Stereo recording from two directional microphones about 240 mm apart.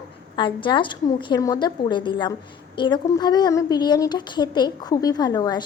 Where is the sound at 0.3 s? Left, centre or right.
Centre.